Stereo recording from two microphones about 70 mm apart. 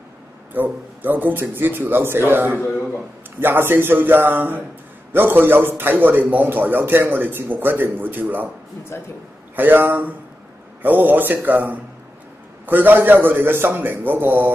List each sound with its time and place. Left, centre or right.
0.5 s a man's voice: right
8.9 s a man's voice: left
9.6 s a man's voice: right